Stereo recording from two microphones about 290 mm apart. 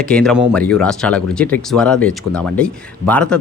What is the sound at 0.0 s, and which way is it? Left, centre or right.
Speech, centre.